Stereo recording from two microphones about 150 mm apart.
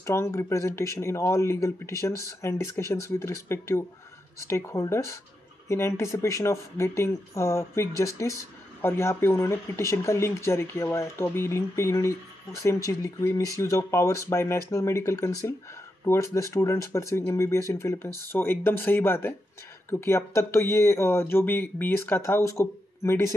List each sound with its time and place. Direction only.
0.0 s speech: 20° left (ahead or behind)